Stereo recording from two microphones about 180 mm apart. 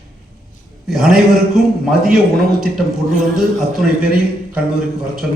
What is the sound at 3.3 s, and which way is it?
Speech, 5° right (ahead or behind).